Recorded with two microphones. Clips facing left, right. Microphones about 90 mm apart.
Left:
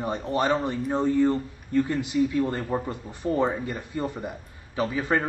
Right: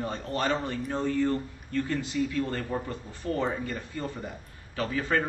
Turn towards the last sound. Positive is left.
turn(degrees=15)  # may be behind; listen again after turning